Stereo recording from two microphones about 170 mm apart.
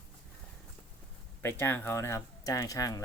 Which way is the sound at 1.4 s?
15° left (ahead or behind).